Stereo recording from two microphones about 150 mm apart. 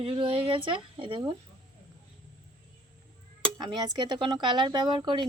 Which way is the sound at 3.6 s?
30° right (ahead or behind).